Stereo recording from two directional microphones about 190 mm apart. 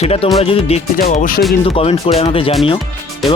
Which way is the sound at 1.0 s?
45° left (ahead or behind).